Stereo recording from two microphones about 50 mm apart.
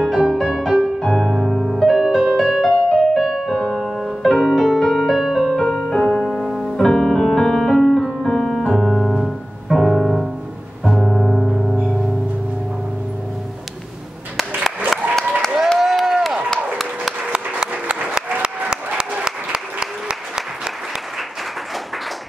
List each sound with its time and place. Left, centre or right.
0.3 s music: centre
3.7 s music: centre
4.2 s music: centre
6.8 s piano: centre
9.2 s music: centre
11.0 s gong: centre
14.9 s applause: centre
15.8 s a sound: centre
17.3 s a sound: centre
18.9 s applause: centre